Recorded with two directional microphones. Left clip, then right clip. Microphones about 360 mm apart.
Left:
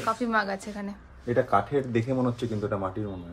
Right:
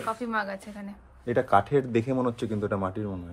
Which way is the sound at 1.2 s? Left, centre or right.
Right.